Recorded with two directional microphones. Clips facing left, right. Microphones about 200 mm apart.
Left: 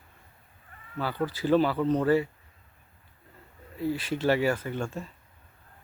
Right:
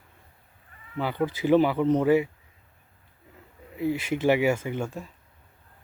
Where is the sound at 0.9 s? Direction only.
20° right (ahead or behind).